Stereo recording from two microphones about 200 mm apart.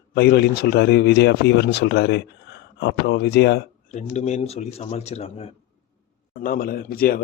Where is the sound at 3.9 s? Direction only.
35° left (ahead or behind).